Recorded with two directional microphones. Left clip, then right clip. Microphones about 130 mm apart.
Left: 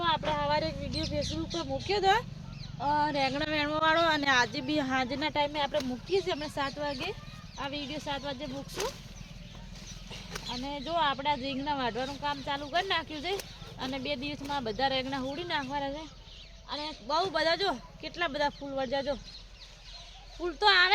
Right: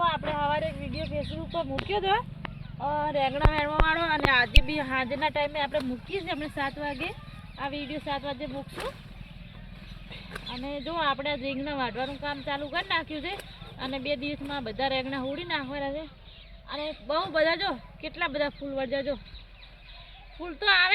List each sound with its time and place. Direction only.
0.3 s a sound: 40° left (ahead or behind)
1.2 s speech: 55° left (ahead or behind)
10.4 s speech: 50° left (ahead or behind)
20.4 s speech: 50° left (ahead or behind)